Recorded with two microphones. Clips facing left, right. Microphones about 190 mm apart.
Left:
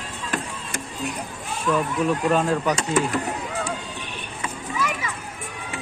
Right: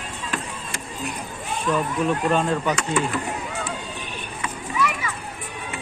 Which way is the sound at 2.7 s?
40° left (ahead or behind).